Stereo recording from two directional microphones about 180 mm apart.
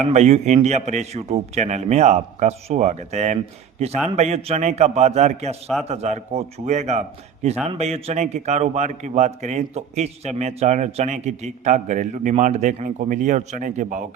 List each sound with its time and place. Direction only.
0.1 s a man's voice: 40° right (ahead or behind)